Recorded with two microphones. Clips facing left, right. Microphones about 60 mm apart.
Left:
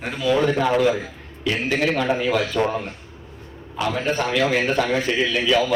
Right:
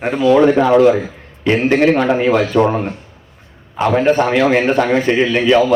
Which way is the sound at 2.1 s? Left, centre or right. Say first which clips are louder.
Right 7 dB; right.